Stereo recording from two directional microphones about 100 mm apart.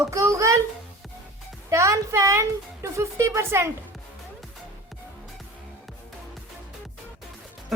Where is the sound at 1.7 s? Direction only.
30° right (ahead or behind).